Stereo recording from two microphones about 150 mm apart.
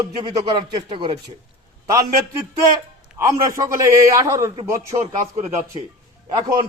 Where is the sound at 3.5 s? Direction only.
20° right (ahead or behind).